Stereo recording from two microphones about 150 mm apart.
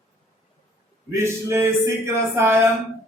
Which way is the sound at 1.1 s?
20° right (ahead or behind).